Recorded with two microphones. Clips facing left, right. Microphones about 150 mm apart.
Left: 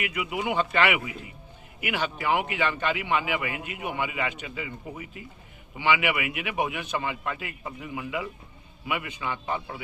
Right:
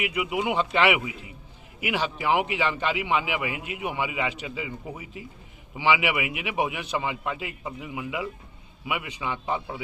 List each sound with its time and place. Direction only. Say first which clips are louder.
0.0 s a man's voice: right 3 dB; 15° right (ahead or behind)